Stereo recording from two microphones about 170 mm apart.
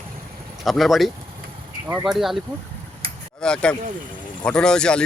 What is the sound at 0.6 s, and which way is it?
Speech, centre (ahead or behind).